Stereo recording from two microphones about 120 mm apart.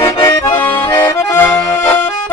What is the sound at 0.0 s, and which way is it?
Accordion, 25° left (ahead or behind).